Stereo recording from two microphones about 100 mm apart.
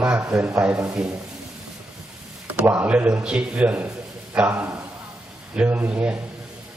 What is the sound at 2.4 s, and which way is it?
A man's voice, 15° right (ahead or behind).